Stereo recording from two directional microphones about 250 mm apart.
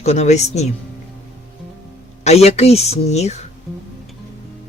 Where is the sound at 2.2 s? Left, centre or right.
Left.